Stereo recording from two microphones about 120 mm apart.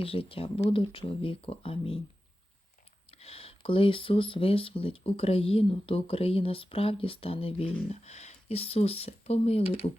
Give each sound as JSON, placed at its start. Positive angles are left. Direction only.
{"t": 0.0, "sound": "speech", "side_deg": 50}
{"t": 3.1, "sound": "speech", "side_deg": 55}
{"t": 7.9, "sound": "speech", "side_deg": 65}